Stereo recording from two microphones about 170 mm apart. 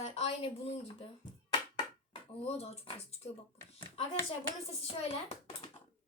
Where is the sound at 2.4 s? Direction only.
35° left (ahead or behind).